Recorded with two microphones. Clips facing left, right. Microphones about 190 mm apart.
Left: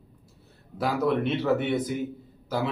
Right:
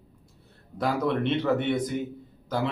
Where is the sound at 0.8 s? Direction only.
5° left (ahead or behind).